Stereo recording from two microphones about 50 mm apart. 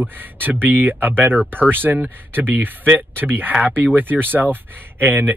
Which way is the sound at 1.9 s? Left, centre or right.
Right.